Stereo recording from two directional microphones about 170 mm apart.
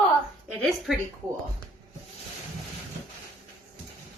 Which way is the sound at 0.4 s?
Centre (ahead or behind).